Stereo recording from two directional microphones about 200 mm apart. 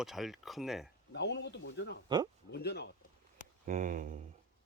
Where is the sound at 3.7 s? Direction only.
40° right (ahead or behind).